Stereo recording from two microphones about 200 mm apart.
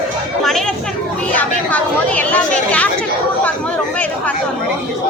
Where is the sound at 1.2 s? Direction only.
10° left (ahead or behind).